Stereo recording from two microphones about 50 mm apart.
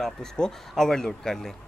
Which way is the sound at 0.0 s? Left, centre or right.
Centre.